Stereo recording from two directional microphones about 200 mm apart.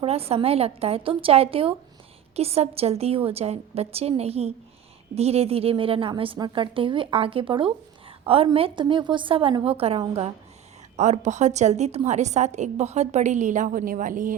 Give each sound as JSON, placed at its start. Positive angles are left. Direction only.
{"t": 0.0, "sound": "a woman's voice", "side_deg": -30}